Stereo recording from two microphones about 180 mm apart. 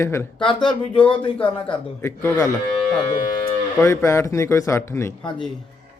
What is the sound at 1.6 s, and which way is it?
Speech, 10° left (ahead or behind).